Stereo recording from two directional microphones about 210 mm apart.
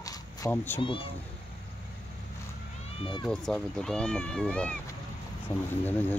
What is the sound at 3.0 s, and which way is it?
Speech, 25° left (ahead or behind).